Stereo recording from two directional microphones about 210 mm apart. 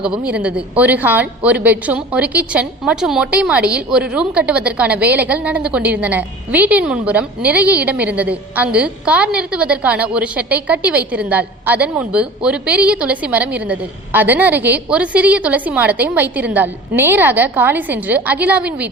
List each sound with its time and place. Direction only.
0.0 s a woman's voice: 5° right (ahead or behind)